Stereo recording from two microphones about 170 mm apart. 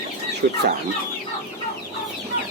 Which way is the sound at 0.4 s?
90° right.